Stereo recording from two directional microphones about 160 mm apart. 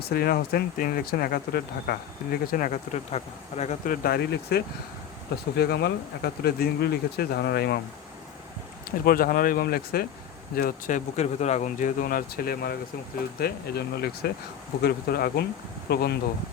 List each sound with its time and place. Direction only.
0.0 s speech: 70° left (ahead or behind); by 3.8 s 45° left (ahead or behind)
3.8 s speech: 70° left (ahead or behind); by 7.8 s 85° left
9.0 s speech: 65° left (ahead or behind)
13.4 s speech: 85° left
14.8 s speech: 70° left (ahead or behind)